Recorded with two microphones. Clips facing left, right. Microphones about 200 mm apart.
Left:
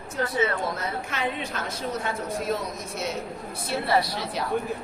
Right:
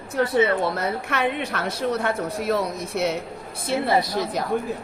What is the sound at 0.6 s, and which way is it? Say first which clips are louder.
A woman's voice: right 5 dB; 65° right (ahead or behind).